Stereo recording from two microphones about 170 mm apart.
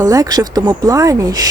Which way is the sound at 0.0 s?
20° right (ahead or behind).